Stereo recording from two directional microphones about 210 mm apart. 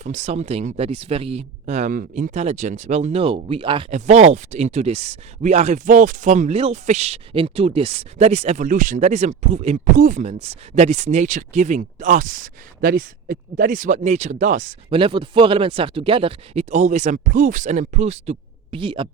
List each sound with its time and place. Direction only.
0.0 s speech: 35° right (ahead or behind)